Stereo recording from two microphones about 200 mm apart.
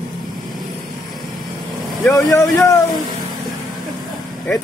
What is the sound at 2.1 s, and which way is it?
Speech, 15° left (ahead or behind).